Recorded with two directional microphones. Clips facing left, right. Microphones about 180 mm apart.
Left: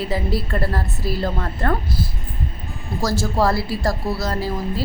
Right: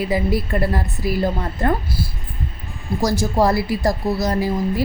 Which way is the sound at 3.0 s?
15° right (ahead or behind).